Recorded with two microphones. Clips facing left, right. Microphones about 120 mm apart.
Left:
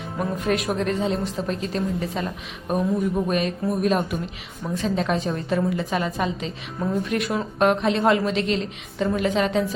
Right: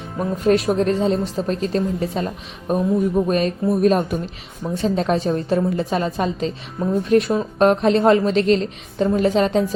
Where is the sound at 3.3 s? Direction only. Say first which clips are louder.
Right 4 dB; 40° right (ahead or behind).